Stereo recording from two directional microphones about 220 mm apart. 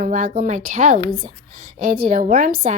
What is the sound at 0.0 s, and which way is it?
A woman's voice, 40° right (ahead or behind).